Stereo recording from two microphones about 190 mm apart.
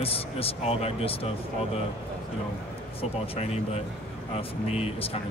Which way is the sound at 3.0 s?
30° left (ahead or behind).